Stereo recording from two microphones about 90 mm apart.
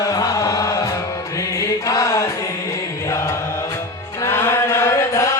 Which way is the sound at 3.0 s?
30° left (ahead or behind).